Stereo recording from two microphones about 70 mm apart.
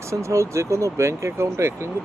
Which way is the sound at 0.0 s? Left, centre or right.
Right.